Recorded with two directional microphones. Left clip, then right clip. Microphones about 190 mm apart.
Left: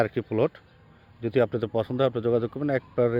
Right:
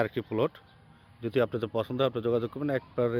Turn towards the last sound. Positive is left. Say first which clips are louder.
# left 4 dB
turn(degrees=20)  # may be behind; listen again after turning